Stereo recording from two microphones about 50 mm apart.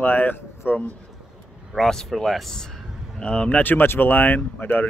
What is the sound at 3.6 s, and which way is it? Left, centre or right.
Speech, left.